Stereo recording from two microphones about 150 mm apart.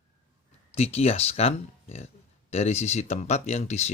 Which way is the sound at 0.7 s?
45° left (ahead or behind).